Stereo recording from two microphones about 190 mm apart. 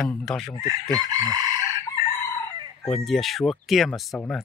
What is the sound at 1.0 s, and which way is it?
Chicken, 20° right (ahead or behind).